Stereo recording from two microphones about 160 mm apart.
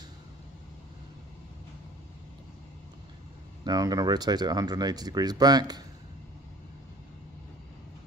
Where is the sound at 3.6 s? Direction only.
25° right (ahead or behind).